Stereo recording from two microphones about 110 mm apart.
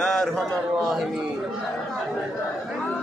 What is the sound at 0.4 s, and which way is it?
Speech, centre (ahead or behind).